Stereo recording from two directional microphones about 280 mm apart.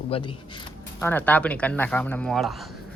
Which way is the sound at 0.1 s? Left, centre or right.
Centre.